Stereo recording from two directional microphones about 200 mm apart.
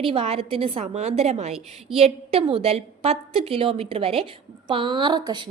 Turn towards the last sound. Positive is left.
turn(degrees=-20)  # may be behind; listen again after turning